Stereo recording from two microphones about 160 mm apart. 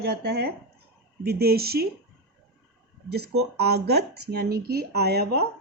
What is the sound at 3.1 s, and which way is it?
Speech, 90° right.